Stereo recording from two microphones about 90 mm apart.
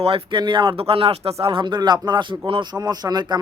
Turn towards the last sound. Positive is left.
turn(degrees=-50)  # may be behind; listen again after turning